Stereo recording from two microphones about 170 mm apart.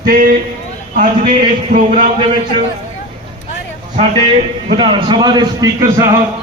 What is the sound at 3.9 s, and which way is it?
A man's voice, 35° right (ahead or behind).